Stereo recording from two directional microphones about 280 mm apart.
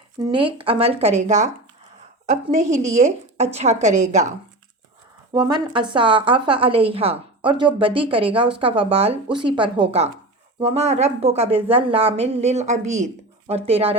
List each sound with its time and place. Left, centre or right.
0.2 s a woman's voice: centre